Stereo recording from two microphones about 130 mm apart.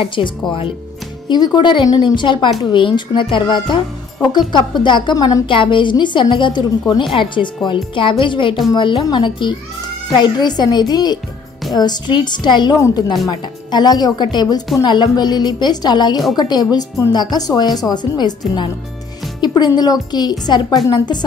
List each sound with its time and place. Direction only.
0.0 s a woman's voice: 40° left (ahead or behind)
12.7 s a woman's voice: 20° left (ahead or behind)
13.3 s a woman's voice: 30° left (ahead or behind)
19.4 s a woman's voice: 35° left (ahead or behind)